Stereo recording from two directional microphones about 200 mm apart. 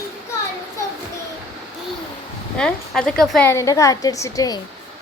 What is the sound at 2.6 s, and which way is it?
A woman's voice, 5° left (ahead or behind).